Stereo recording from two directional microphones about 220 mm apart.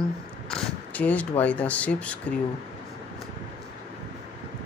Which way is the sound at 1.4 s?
5° left (ahead or behind).